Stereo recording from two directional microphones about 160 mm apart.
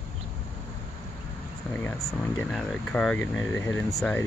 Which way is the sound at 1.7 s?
10° left (ahead or behind).